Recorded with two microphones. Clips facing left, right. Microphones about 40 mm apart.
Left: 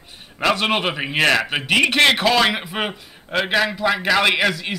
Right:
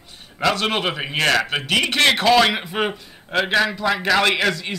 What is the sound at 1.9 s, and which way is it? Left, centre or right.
A man's voice, centre.